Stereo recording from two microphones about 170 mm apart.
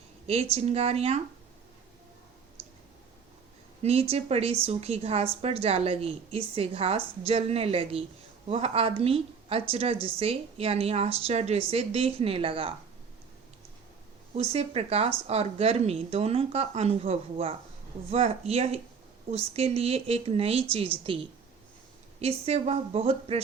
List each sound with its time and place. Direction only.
0.5 s a woman's voice: 40° right (ahead or behind)
4.1 s a woman's voice: 35° right (ahead or behind)
14.3 s a woman's voice: 35° right (ahead or behind)
22.2 s a woman's voice: 35° right (ahead or behind)